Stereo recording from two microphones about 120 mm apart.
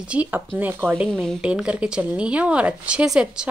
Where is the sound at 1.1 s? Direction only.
5° left (ahead or behind).